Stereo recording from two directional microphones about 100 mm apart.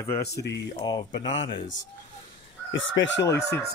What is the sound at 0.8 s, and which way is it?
Speech, 45° left (ahead or behind).